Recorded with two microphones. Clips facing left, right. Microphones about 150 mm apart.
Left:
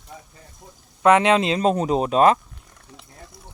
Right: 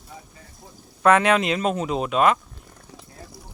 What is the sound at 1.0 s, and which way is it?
Speech, 20° left (ahead or behind).